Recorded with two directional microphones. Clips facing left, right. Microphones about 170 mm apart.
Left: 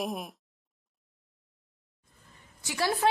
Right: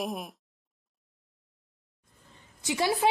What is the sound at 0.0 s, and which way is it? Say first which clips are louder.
Speech: even; centre (ahead or behind).